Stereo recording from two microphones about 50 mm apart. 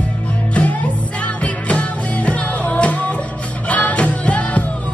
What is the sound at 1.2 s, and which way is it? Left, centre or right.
Music, left.